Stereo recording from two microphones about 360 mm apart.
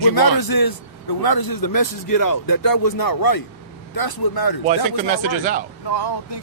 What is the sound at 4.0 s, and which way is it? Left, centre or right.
Speech, left.